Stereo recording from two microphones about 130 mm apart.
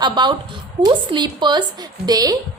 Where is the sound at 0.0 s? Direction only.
35° right (ahead or behind).